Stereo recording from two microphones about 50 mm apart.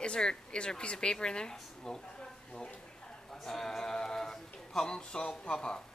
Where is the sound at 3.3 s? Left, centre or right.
Centre.